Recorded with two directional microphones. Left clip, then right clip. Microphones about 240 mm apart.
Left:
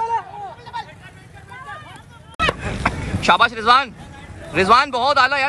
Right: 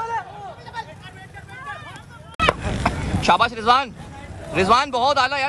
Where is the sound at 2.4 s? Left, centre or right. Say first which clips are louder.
Right 2 dB; centre.